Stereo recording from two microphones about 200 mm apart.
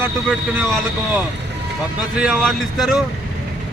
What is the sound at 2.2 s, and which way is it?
Speech, centre (ahead or behind).